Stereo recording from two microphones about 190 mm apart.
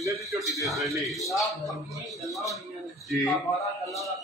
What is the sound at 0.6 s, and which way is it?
A man's voice, centre (ahead or behind).